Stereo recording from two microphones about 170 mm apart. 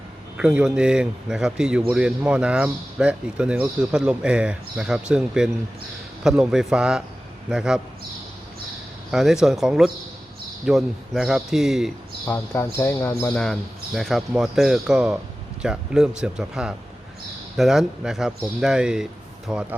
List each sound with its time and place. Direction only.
0.3 s a man's voice: 5° right (ahead or behind)
9.1 s a man's voice: centre (ahead or behind)
12.2 s speech: 15° left (ahead or behind)
13.4 s a man's voice: centre (ahead or behind)